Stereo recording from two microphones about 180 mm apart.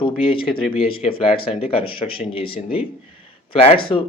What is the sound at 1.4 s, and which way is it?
Speech, 30° left (ahead or behind).